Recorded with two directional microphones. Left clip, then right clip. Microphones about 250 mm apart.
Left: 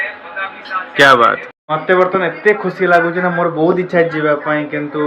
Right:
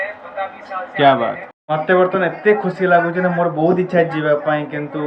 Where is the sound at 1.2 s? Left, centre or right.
Centre.